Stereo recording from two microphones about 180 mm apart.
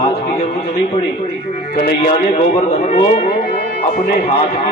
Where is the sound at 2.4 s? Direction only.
35° left (ahead or behind).